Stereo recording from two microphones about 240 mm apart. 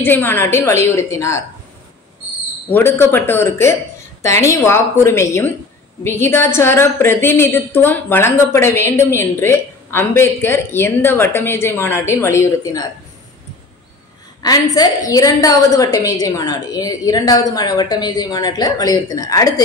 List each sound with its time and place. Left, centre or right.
0.0 s a woman's voice: centre
2.7 s a woman's voice: centre
14.4 s a woman's voice: centre